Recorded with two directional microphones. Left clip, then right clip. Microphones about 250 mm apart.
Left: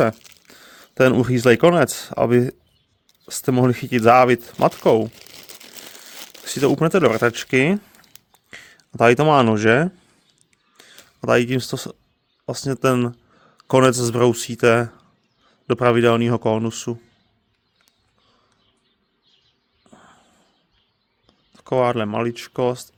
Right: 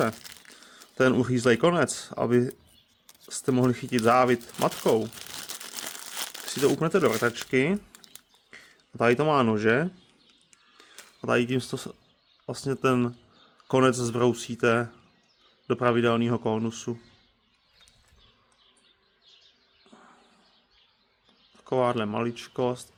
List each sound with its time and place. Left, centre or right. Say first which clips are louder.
0.5 s speech: left 8 dB; left
6.4 s speech: left 7 dB; left
10.8 s a sound: left 7 dB; left
11.2 s speech: left 8 dB; left
19.9 s a sound: left 5 dB; left
21.5 s speech: left 6 dB; left